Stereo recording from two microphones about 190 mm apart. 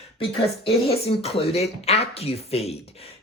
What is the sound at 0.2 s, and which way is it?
Speech, 30° left (ahead or behind).